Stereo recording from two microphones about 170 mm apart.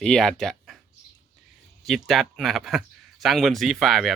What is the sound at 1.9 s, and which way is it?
Speech, centre (ahead or behind).